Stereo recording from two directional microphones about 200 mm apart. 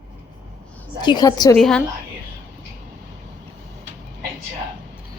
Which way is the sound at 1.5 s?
Centre (ahead or behind).